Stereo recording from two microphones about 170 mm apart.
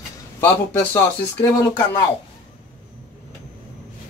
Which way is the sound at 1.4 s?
15° left (ahead or behind).